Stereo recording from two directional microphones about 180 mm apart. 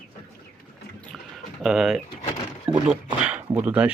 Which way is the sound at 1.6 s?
Centre (ahead or behind).